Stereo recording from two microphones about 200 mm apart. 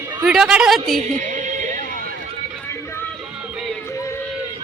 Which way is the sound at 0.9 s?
40° right (ahead or behind).